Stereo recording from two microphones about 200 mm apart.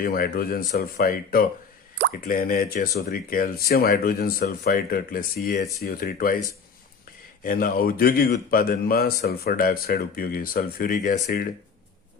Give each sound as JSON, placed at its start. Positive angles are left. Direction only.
{"t": 0.0, "sound": "speech", "side_deg": 50}
{"t": 7.4, "sound": "speech", "side_deg": 45}